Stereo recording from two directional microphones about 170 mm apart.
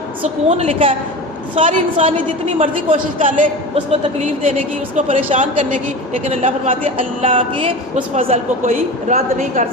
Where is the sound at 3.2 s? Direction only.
50° right (ahead or behind).